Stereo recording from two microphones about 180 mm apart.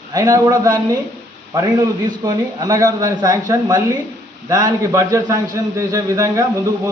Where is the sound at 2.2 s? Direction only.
20° right (ahead or behind).